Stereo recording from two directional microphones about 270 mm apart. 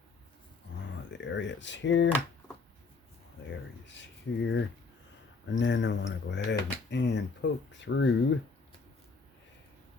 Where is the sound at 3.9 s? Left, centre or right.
Left.